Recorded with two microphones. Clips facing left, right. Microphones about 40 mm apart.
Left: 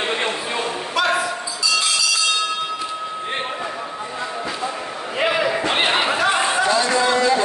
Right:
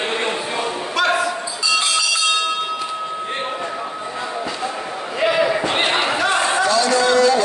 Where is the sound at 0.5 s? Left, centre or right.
Centre.